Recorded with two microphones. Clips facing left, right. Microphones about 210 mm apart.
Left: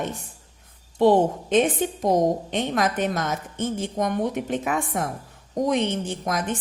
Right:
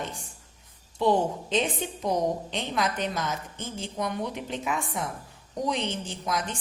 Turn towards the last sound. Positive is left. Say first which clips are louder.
# left 5 dB
turn(degrees=55)  # may be behind; listen again after turning